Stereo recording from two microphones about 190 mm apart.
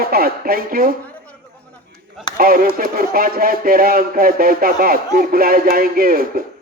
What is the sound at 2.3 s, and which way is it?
A man's voice, 50° right (ahead or behind).